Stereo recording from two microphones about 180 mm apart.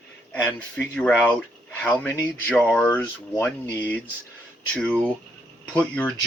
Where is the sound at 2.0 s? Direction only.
20° left (ahead or behind).